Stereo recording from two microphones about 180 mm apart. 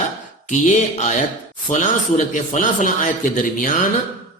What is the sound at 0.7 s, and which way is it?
A man's voice, 40° left (ahead or behind).